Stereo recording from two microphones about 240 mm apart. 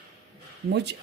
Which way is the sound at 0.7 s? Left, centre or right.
Right.